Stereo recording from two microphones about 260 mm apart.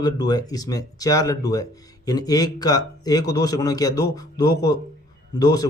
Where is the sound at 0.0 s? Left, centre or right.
Centre.